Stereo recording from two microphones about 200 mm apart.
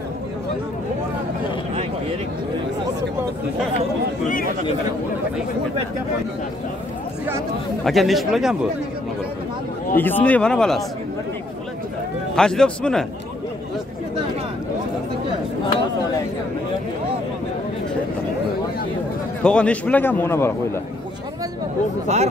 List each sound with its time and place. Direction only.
7.8 s speech: centre (ahead or behind)
9.9 s a man's voice: 10° left (ahead or behind)
12.4 s speech: 5° left (ahead or behind)
19.4 s a man's voice: 5° left (ahead or behind)
22.0 s speech: 35° right (ahead or behind)